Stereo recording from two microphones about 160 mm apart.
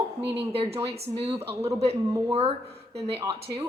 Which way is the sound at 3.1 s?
25° right (ahead or behind).